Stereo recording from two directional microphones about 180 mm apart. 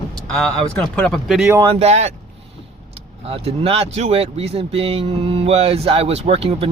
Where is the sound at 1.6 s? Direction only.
35° right (ahead or behind).